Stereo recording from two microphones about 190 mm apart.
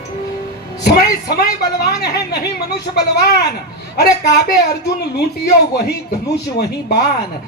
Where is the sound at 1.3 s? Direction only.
60° left (ahead or behind).